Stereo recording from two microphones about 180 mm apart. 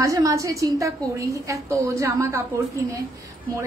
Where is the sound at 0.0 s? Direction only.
20° right (ahead or behind).